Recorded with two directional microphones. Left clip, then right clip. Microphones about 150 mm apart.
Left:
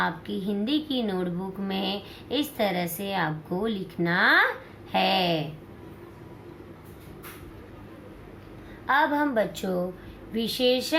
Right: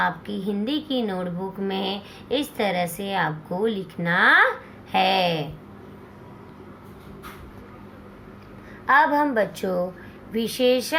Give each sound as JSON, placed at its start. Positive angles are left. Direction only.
{"t": 0.0, "sound": "a woman's voice", "side_deg": -45}
{"t": 8.9, "sound": "a woman's voice", "side_deg": -45}